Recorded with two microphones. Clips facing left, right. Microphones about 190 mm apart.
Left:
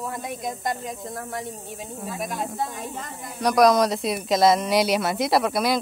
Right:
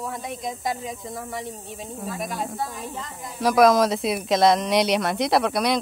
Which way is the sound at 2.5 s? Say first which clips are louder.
Left 1 dB; 20° left (ahead or behind).